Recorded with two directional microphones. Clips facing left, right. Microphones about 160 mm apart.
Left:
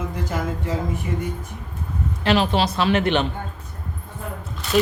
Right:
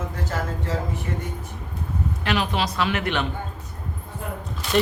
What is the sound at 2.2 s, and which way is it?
A woman's voice, 30° left (ahead or behind).